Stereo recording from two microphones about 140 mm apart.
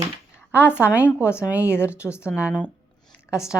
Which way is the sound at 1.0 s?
15° left (ahead or behind).